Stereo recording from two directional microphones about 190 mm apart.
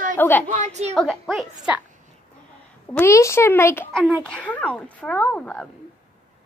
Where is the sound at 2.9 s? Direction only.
15° left (ahead or behind).